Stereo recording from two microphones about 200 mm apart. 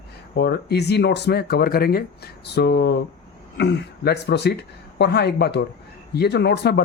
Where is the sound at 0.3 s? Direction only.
55° left (ahead or behind).